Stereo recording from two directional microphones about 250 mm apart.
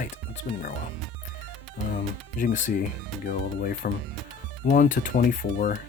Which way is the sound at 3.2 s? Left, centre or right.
Left.